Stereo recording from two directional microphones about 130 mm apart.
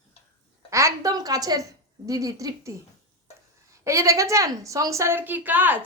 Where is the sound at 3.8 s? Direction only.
25° right (ahead or behind).